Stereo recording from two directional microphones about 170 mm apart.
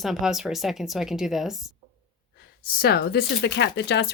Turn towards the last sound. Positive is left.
turn(degrees=85)